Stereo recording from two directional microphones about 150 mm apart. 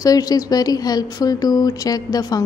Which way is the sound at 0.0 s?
25° left (ahead or behind).